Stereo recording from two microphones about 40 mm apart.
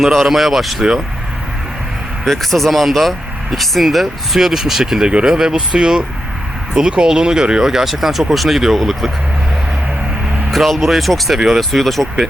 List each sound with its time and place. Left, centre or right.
0.1 s speech: centre
2.2 s speech: centre
5.0 s speech: centre
10.5 s speech: centre